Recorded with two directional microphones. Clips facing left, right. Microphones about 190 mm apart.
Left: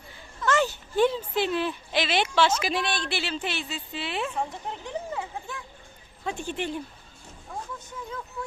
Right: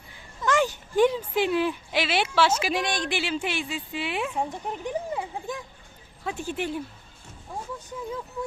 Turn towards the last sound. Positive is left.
turn(degrees=-5)  # may be behind; listen again after turning